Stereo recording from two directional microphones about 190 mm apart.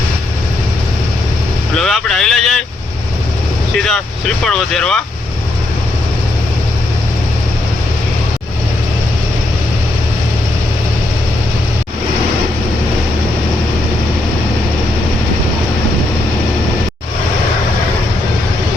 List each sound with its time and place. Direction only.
1.8 s speech: centre (ahead or behind)
4.4 s speech: 5° left (ahead or behind)